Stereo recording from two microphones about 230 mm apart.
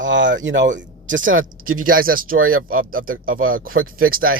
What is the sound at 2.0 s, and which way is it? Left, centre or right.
Speech, right.